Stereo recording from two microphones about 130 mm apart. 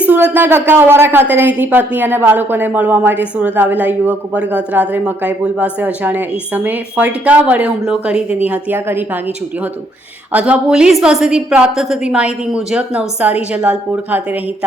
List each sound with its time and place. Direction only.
0.1 s a woman's voice: 15° right (ahead or behind)
10.3 s a woman's voice: 10° right (ahead or behind)